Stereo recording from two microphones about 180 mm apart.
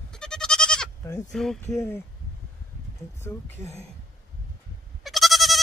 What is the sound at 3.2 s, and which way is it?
Speech, 15° left (ahead or behind).